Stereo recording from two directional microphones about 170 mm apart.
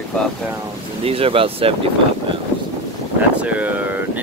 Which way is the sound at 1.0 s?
35° right (ahead or behind).